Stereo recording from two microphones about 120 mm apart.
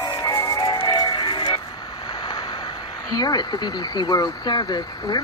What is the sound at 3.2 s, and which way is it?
Frog, 35° left (ahead or behind).